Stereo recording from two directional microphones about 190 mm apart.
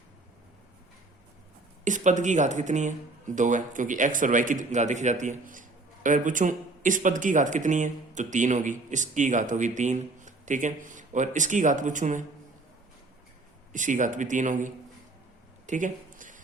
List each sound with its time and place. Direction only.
1.8 s speech: 40° right (ahead or behind)
13.7 s speech: 40° right (ahead or behind)
15.6 s a sound: 40° right (ahead or behind)